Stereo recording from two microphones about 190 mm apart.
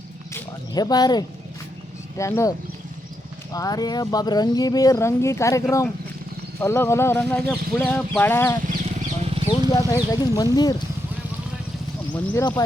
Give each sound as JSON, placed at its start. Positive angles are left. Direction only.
{"t": 0.7, "sound": "speech", "side_deg": 20}
{"t": 8.6, "sound": "wild animals", "side_deg": -40}
{"t": 9.5, "sound": "speech", "side_deg": 20}
{"t": 12.1, "sound": "speech", "side_deg": 10}